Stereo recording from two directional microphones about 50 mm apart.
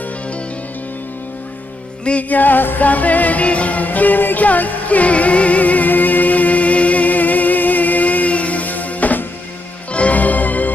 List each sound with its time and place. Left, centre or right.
2.0 s music: left